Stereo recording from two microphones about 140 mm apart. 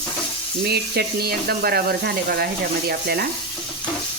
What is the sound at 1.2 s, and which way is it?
Speech, 90° right.